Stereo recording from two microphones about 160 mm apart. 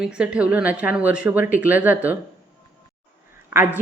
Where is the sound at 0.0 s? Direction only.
5° right (ahead or behind).